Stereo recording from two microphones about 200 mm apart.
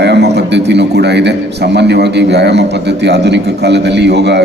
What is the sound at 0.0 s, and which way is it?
A man's voice, 60° right (ahead or behind).